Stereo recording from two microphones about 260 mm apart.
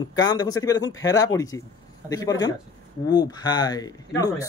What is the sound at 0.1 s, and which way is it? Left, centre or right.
Speech, centre.